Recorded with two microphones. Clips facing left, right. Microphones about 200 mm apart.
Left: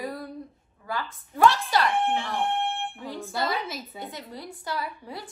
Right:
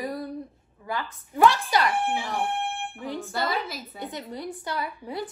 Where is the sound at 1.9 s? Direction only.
5° right (ahead or behind).